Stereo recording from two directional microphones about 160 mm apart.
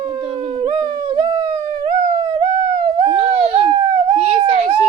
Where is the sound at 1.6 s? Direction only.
50° right (ahead or behind).